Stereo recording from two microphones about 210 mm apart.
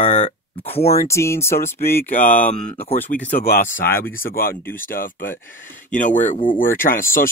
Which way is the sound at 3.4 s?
45° left (ahead or behind).